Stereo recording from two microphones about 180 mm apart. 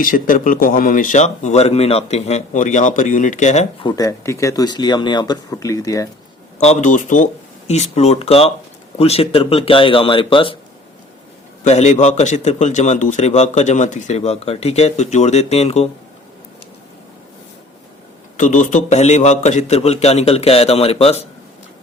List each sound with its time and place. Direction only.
0.0 s speech: 50° left (ahead or behind)
3.8 s speech: 20° left (ahead or behind)
6.6 s a man's voice: 40° left (ahead or behind)
11.6 s a man's voice: 40° left (ahead or behind)
18.3 s a man's voice: 45° left (ahead or behind)